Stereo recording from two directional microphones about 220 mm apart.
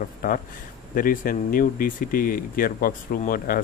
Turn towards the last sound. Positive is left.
turn(degrees=40)  # may be behind; listen again after turning